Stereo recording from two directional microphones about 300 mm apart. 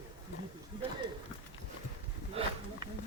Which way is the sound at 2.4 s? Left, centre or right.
Centre.